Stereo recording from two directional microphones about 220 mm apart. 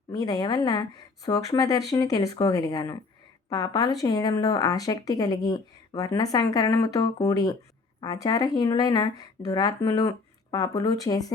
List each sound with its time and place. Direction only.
0.1 s speech: 15° left (ahead or behind)